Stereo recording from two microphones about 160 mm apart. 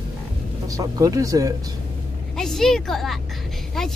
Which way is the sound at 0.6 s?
25° right (ahead or behind).